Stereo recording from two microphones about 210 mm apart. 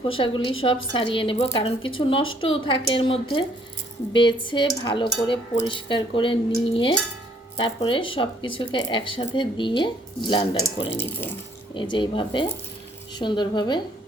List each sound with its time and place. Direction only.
0.2 s speech: 25° left (ahead or behind)
10.9 s speech: 10° left (ahead or behind)
11.8 s speech: 20° left (ahead or behind)